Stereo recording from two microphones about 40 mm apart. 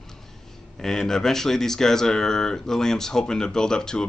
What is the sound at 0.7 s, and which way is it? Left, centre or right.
Speech, centre.